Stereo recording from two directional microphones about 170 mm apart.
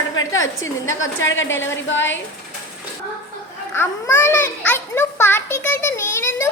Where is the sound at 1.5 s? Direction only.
15° left (ahead or behind).